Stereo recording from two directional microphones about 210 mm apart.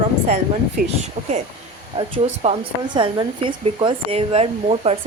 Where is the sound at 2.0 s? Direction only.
25° right (ahead or behind).